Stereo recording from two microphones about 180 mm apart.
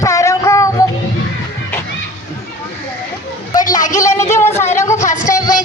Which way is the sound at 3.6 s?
45° left (ahead or behind).